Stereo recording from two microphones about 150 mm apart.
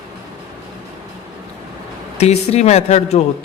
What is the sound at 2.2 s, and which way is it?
A man's voice, 45° left (ahead or behind).